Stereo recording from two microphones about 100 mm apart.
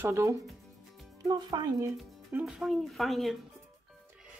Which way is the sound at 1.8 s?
20° right (ahead or behind).